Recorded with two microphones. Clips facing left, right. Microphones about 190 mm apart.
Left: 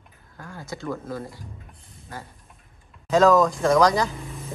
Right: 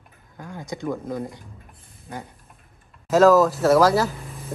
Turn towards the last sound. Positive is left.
turn(degrees=-5)  # may be behind; listen again after turning